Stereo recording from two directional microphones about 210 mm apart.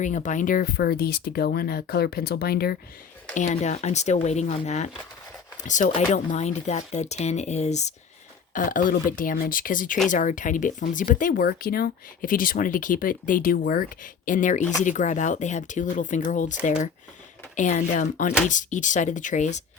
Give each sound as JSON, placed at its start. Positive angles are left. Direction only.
{"t": 0.0, "sound": "speech", "side_deg": 35}
{"t": 3.3, "sound": "speech", "side_deg": 35}